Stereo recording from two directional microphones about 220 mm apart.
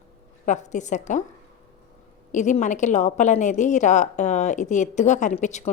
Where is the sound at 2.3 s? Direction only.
35° left (ahead or behind).